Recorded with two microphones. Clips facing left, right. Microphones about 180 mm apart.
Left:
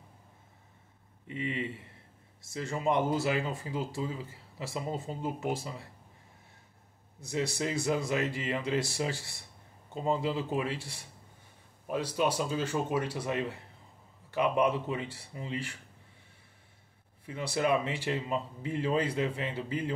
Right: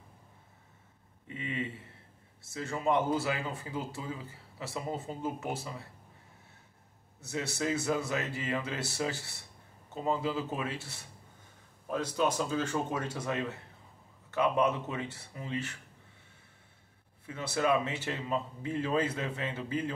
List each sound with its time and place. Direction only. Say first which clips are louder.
1.3 s speech: left 2 dB; 20° left (ahead or behind)
7.2 s speech: left 3 dB; 15° left (ahead or behind)
10.0 s speech: left 1 dB; 25° left (ahead or behind)
10.8 s speech: left 2 dB; 15° left (ahead or behind)
17.3 s speech: even; 15° left (ahead or behind)